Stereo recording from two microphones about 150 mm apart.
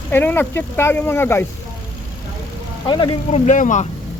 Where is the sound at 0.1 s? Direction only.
15° left (ahead or behind).